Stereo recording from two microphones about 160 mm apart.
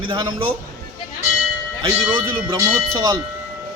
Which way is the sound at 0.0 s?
30° right (ahead or behind).